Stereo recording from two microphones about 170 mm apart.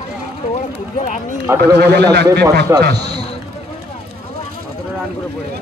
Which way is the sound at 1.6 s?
75° right (ahead or behind).